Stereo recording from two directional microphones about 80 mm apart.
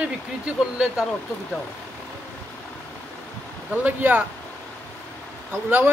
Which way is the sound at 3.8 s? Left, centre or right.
Right.